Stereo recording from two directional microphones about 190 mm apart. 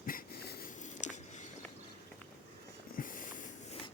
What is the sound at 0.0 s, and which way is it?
Wheeze, 50° left (ahead or behind).